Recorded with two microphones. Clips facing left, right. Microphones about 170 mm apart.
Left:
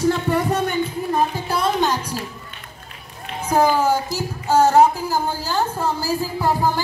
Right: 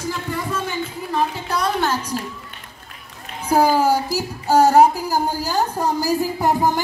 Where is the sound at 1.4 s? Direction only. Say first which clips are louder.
Left 1 dB; 25° left (ahead or behind).